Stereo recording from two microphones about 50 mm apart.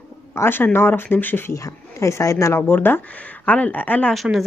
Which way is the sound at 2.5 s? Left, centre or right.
Left.